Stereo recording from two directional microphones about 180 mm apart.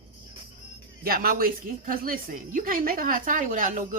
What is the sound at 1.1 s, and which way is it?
Speech, 55° right (ahead or behind).